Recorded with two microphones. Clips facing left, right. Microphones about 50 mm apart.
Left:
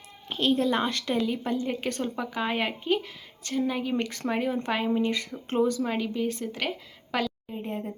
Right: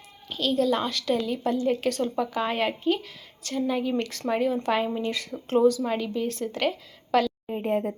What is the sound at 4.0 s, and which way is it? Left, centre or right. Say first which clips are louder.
Speech: right 1 dB; left.